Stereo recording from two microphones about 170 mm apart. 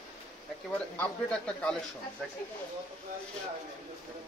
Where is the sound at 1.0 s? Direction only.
5° left (ahead or behind).